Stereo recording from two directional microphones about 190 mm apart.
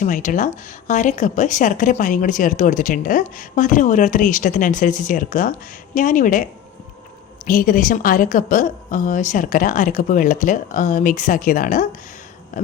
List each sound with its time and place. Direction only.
0.0 s speech: 40° left (ahead or behind)